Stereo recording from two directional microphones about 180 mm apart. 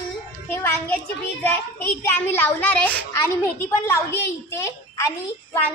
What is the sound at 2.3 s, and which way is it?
Speech, 10° left (ahead or behind).